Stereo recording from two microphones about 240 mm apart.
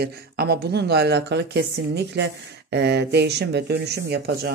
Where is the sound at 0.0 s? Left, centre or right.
Right.